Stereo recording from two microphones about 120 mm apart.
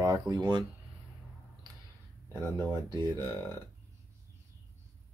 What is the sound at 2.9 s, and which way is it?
Speech, 35° right (ahead or behind).